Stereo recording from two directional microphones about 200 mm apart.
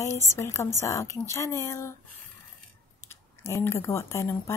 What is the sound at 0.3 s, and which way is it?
A woman's voice, 15° left (ahead or behind).